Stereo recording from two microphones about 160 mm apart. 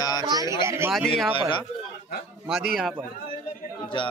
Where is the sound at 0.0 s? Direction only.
25° left (ahead or behind).